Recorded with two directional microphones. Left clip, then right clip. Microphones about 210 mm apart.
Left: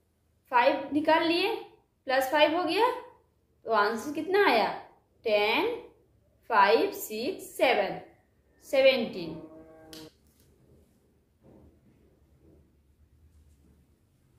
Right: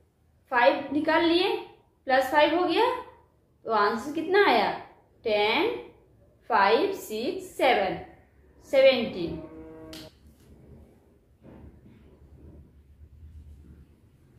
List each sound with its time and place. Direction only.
0.5 s a woman's voice: 20° left (ahead or behind)